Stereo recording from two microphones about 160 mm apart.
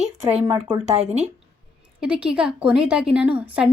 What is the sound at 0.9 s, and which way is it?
Speech, 45° right (ahead or behind).